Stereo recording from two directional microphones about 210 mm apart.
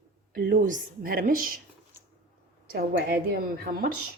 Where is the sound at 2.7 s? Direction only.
45° right (ahead or behind).